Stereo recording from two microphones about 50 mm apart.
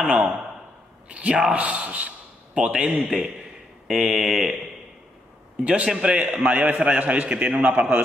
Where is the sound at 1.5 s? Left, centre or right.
Right.